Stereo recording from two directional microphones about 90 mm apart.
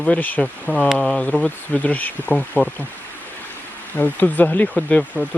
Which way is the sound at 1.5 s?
15° left (ahead or behind).